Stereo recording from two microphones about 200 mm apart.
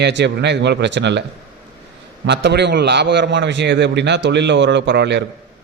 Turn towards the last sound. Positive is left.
turn(degrees=-60)  # may be behind; listen again after turning